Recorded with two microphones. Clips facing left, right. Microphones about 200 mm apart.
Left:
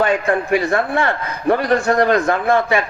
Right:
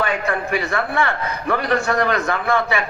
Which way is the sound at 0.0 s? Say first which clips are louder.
Left 5 dB; 45° left (ahead or behind).